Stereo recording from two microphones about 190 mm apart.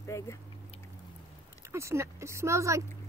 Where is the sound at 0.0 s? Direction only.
15° left (ahead or behind).